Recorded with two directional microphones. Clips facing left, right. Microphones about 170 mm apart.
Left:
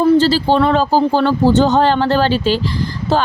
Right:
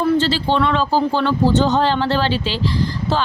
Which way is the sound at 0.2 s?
40° left (ahead or behind).